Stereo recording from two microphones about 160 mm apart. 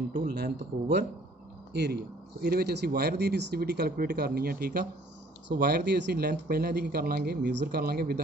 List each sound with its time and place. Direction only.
0.3 s speech: 90° right
2.4 s speech: 80° right